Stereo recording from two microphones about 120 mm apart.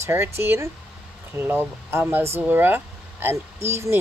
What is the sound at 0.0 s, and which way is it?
Speech, 20° right (ahead or behind).